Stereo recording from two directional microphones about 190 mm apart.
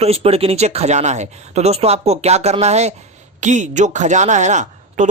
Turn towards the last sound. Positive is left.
turn(degrees=-40)  # may be behind; listen again after turning